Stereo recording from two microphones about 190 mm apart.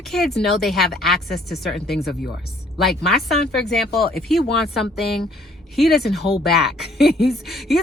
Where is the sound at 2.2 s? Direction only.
55° left (ahead or behind).